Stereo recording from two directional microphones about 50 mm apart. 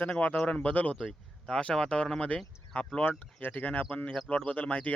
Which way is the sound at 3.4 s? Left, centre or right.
Left.